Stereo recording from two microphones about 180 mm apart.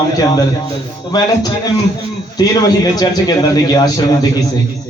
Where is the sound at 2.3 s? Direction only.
20° left (ahead or behind).